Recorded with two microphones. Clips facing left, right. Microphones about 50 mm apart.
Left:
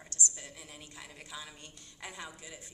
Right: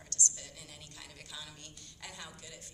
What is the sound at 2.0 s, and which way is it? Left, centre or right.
Speech, centre.